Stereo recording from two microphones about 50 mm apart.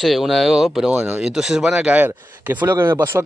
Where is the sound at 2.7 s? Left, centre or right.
Right.